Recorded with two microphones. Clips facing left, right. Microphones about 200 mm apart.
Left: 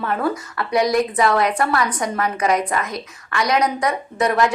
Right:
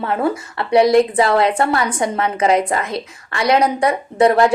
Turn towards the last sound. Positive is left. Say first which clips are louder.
# right 6 dB
turn(degrees=-30)  # may be behind; listen again after turning